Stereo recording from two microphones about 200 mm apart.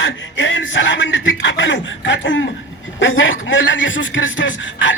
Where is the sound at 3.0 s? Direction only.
75° left (ahead or behind).